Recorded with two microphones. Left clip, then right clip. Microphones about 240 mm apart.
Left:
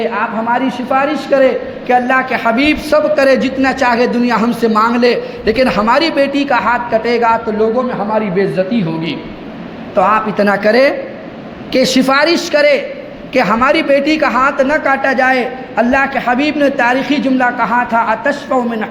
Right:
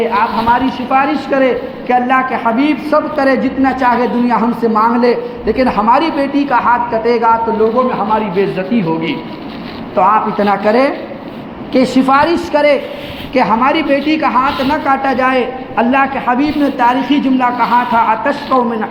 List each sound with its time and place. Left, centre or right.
0.0 s a man's voice: left